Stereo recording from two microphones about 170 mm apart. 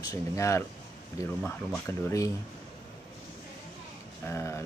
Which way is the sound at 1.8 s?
20° left (ahead or behind).